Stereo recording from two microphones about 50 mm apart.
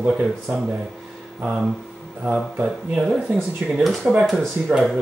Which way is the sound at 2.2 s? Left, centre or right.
Centre.